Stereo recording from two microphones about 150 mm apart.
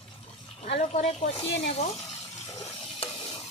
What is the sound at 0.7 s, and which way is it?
Speech, 45° left (ahead or behind).